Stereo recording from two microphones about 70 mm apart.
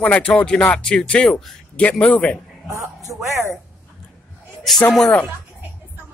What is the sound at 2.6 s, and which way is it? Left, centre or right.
Speech, right.